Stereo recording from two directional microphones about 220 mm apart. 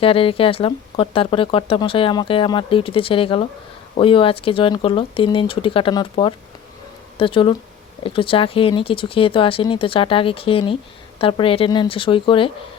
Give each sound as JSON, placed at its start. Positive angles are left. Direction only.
{"t": 0.0, "sound": "speech", "side_deg": 25}